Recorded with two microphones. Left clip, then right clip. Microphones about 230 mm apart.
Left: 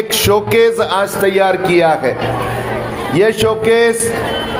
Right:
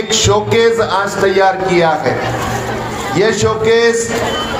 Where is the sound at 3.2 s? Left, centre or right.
Left.